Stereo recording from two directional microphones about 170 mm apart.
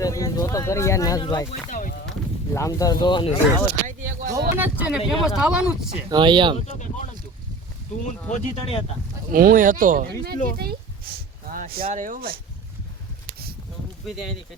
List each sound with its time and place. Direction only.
0.0 s speech: 20° left (ahead or behind)
3.8 s a sound: 50° right (ahead or behind)
4.5 s speech: 10° right (ahead or behind)
6.1 s speech: 25° right (ahead or behind)
6.7 s a sound: 45° left (ahead or behind)
8.0 s speech: 40° left (ahead or behind)
9.3 s speech: 55° right (ahead or behind)